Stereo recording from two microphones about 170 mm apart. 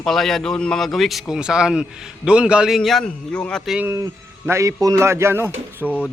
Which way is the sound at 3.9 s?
15° right (ahead or behind).